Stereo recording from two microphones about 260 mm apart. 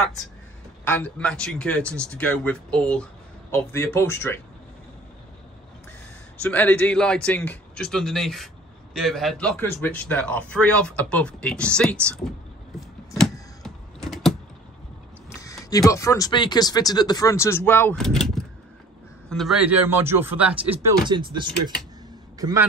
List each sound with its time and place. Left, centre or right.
0.8 s a man's voice: centre
6.4 s a man's voice: centre
13.2 s typing: centre
15.2 s a sound: centre
15.9 s a man's voice: centre
21.1 s a man's voice: centre